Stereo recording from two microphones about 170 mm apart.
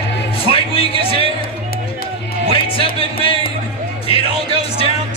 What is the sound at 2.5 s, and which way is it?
Music, 30° left (ahead or behind).